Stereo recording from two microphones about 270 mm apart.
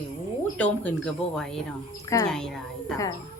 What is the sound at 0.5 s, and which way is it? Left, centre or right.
Speech, centre.